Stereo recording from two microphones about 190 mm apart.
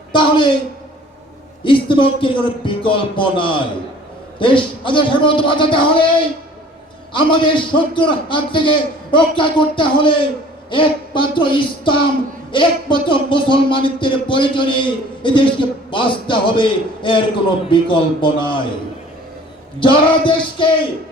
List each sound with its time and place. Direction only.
0.1 s a woman's voice: 25° left (ahead or behind)
1.6 s speech: 25° left (ahead or behind)
7.1 s speech: 25° left (ahead or behind)
19.8 s speech: 25° left (ahead or behind)